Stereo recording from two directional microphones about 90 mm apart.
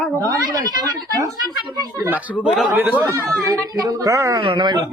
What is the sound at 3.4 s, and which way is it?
Speech, 45° right (ahead or behind).